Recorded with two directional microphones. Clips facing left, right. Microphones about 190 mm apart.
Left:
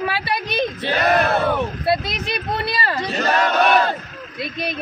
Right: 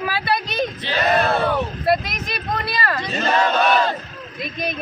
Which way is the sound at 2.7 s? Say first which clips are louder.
Even; 30° left (ahead or behind).